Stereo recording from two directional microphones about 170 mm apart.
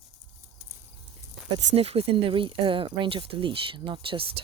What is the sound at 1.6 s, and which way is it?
Speech, 40° right (ahead or behind).